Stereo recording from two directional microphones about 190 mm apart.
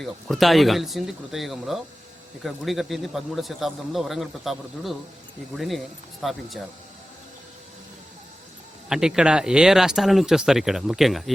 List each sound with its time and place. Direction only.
0.0 s a man's voice: centre (ahead or behind)
8.9 s a man's voice: 5° right (ahead or behind)